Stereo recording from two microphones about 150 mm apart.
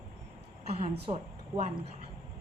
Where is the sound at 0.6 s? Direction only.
45° right (ahead or behind).